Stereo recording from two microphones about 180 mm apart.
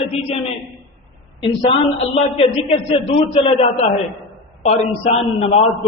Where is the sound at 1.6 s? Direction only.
35° left (ahead or behind).